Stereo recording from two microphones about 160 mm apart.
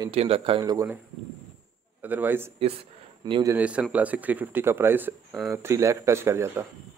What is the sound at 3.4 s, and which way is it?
Speech, 10° right (ahead or behind).